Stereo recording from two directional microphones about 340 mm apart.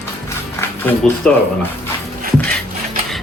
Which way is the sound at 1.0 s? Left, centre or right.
Centre.